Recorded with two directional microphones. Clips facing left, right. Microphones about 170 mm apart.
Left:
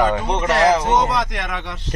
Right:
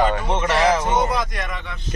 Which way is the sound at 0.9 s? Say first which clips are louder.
Left 2 dB; 85° left.